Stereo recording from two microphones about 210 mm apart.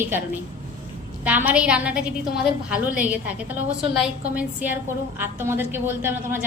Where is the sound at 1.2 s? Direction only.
5° right (ahead or behind).